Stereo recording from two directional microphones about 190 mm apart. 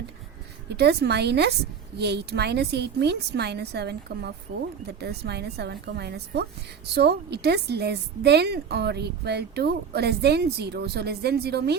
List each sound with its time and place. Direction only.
0.7 s a woman's voice: 60° right (ahead or behind)